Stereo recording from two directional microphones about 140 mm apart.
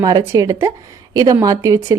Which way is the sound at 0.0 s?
30° right (ahead or behind).